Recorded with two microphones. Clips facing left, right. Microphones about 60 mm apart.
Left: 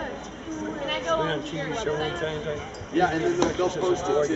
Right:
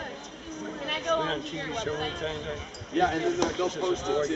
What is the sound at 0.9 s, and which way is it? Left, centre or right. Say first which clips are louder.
Speech: left 2 dB; centre.